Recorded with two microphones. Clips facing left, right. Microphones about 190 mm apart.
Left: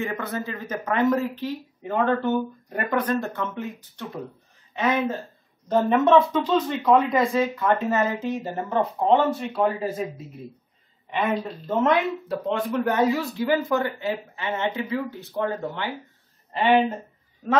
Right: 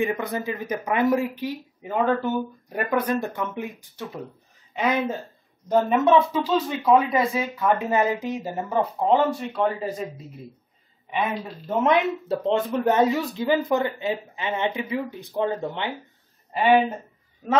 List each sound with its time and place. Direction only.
0.0 s speech: 15° right (ahead or behind)
5.7 s speech: 10° right (ahead or behind)
11.1 s speech: 10° right (ahead or behind)